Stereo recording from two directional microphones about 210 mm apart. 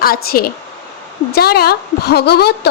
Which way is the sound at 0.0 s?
45° left (ahead or behind).